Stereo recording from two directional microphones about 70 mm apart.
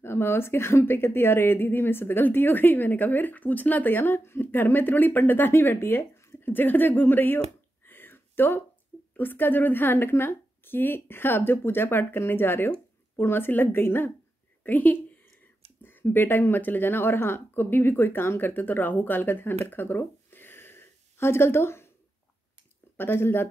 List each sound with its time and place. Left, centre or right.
0.0 s a woman's voice: left
22.9 s speech: left